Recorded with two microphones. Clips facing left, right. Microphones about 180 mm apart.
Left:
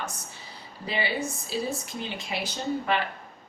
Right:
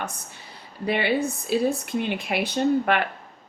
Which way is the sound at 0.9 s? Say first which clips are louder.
Right 6 dB; 60° right (ahead or behind).